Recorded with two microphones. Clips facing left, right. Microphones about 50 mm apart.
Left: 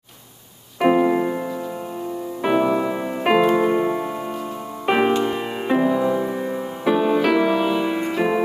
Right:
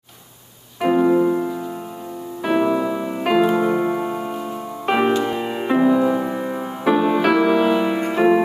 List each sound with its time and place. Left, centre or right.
0.7 s music: centre
2.6 s music: centre
3.9 s music: centre